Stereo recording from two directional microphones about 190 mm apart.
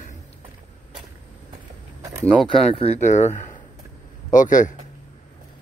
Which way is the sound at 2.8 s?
35° left (ahead or behind).